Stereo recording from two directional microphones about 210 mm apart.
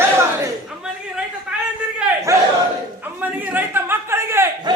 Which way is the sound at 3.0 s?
10° right (ahead or behind).